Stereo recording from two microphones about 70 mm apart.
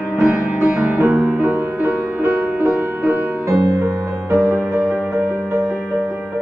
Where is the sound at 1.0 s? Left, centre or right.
Right.